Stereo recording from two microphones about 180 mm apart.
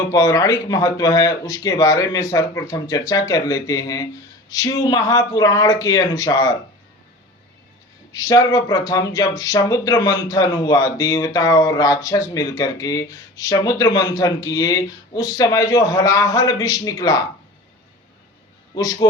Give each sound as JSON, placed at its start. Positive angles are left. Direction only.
{"t": 0.1, "sound": "speech", "side_deg": 20}
{"t": 8.1, "sound": "speech", "side_deg": 20}
{"t": 18.7, "sound": "speech", "side_deg": 20}